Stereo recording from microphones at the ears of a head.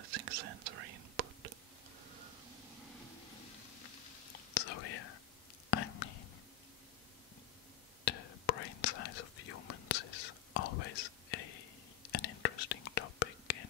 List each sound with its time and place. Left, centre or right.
0.0 s whispering: right
3.8 s whispering: left
8.0 s whispering: left